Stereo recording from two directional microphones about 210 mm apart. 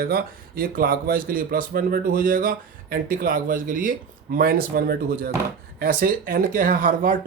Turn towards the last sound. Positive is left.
turn(degrees=-40)  # may be behind; listen again after turning